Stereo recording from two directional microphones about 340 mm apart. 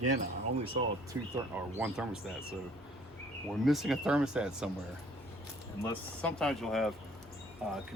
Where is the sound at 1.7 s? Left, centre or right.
Centre.